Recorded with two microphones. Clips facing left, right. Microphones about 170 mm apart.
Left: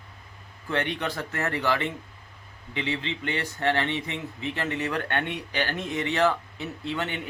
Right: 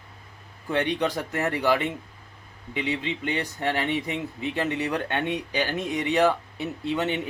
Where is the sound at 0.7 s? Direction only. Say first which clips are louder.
Right 4 dB; 15° right (ahead or behind).